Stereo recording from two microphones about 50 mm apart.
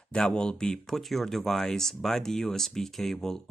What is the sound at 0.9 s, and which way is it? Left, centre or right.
Speech, centre.